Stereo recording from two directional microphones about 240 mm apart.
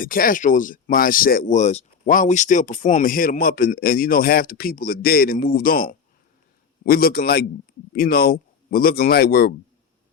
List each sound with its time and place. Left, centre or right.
0.0 s speech: left